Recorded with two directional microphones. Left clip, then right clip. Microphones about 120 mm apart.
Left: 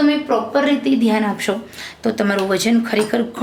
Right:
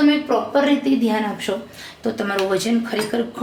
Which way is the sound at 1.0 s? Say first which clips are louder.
Left 3 dB; 40° left (ahead or behind).